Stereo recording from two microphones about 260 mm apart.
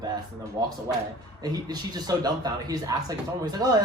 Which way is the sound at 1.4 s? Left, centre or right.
Centre.